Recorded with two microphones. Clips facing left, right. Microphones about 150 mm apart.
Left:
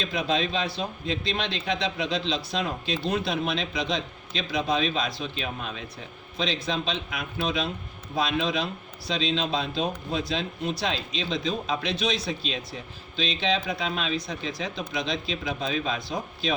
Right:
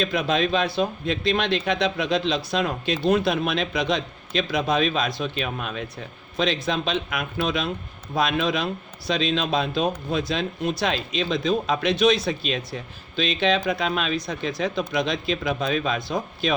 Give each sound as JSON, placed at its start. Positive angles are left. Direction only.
{"t": 0.0, "sound": "speech", "side_deg": -60}